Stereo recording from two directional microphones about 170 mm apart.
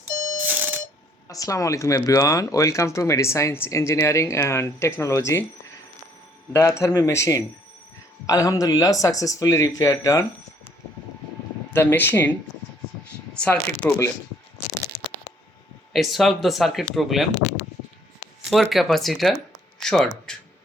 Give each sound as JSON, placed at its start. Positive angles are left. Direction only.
{"t": 0.4, "sound": "alarm clock", "side_deg": -10}
{"t": 1.3, "sound": "speech", "side_deg": 20}
{"t": 6.5, "sound": "speech", "side_deg": 15}
{"t": 11.7, "sound": "speech", "side_deg": 15}
{"t": 13.3, "sound": "shuffling cards", "side_deg": 5}
{"t": 15.9, "sound": "speech", "side_deg": 0}
{"t": 17.3, "sound": "speech", "side_deg": 45}
{"t": 18.5, "sound": "speech", "side_deg": 0}
{"t": 20.3, "sound": "a sound", "side_deg": 5}